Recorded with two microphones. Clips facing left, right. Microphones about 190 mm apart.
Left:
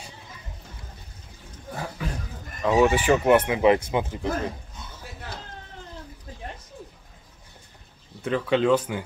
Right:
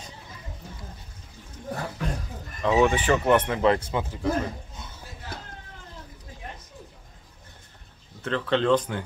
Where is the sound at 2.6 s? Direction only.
5° left (ahead or behind).